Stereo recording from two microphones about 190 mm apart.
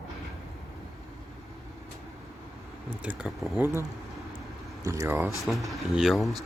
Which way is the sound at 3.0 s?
5° right (ahead or behind).